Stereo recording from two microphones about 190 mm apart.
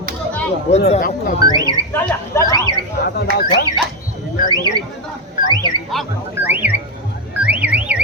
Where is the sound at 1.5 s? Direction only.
20° right (ahead or behind).